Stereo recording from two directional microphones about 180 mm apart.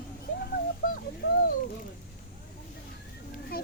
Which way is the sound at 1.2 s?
70° left (ahead or behind).